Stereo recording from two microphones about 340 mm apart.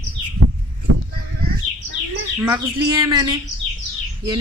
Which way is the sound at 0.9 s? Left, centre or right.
Right.